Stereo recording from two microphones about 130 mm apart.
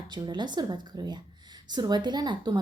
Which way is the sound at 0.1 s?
35° right (ahead or behind).